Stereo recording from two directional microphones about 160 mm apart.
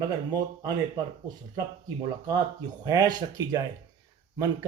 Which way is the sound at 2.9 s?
20° right (ahead or behind).